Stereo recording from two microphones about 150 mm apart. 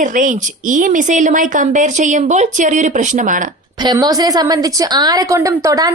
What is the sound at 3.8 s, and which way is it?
A woman's voice, 25° right (ahead or behind).